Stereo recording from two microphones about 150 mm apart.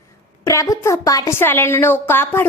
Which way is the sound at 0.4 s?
20° left (ahead or behind).